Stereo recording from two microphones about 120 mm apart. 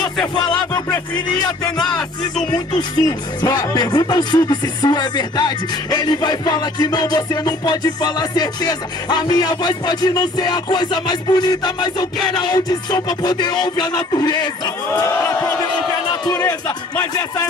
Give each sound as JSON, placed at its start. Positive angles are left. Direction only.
{"t": 0.5, "sound": "speech", "side_deg": 35}
{"t": 1.9, "sound": "music", "side_deg": 5}
{"t": 2.7, "sound": "speech", "side_deg": 30}
{"t": 17.0, "sound": "speech", "side_deg": 30}